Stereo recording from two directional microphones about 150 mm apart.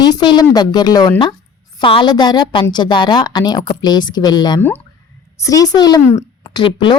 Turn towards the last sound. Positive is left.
turn(degrees=30)  # may be behind; listen again after turning